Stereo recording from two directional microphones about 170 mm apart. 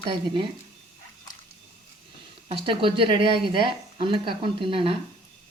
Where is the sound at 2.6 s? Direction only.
30° right (ahead or behind).